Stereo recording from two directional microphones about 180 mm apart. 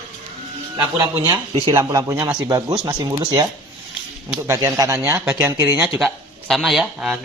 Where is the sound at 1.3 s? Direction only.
25° right (ahead or behind).